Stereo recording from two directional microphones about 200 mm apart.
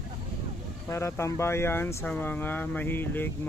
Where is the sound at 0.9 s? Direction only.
15° left (ahead or behind).